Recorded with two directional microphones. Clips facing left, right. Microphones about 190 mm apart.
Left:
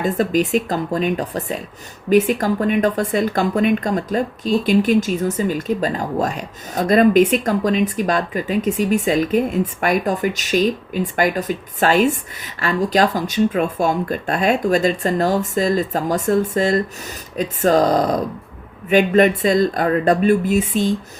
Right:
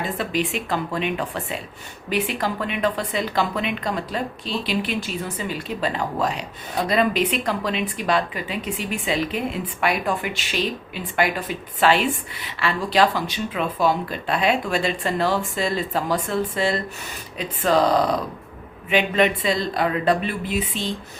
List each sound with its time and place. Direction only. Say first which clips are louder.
0.0 s a woman's voice: left 7 dB; 45° left (ahead or behind)